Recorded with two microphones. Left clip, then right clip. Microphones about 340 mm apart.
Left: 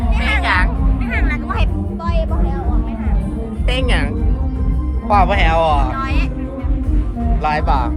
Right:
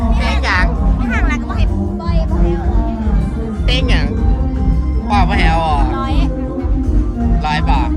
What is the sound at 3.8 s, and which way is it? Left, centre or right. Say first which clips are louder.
Music: even; left.